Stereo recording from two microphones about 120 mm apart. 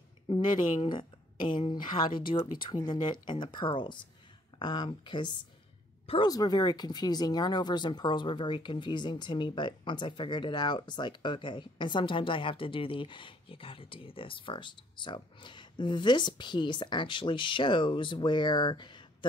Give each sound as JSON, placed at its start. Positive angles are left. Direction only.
{"t": 0.3, "sound": "speech", "side_deg": 40}
{"t": 1.7, "sound": "speech", "side_deg": 40}